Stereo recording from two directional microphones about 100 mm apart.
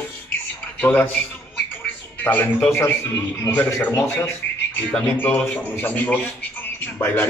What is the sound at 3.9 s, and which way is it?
Speech, 30° left (ahead or behind).